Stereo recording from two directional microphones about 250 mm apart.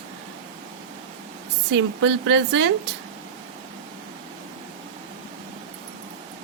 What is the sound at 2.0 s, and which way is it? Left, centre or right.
Speech, right.